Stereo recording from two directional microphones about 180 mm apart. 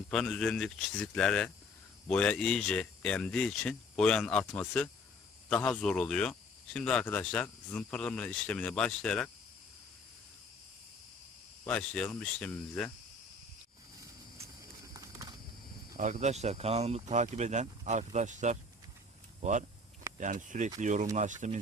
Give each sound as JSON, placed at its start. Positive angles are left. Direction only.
{"t": 0.1, "sound": "speech", "side_deg": 0}
{"t": 11.6, "sound": "speech", "side_deg": 5}
{"t": 16.0, "sound": "speech", "side_deg": -45}